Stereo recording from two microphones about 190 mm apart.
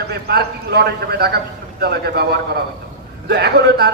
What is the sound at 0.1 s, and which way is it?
A man's voice, 60° right (ahead or behind).